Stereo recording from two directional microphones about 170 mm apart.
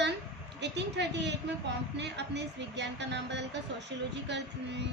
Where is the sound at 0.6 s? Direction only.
90° right.